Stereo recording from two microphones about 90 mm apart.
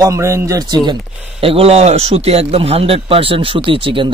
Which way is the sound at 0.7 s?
60° right (ahead or behind).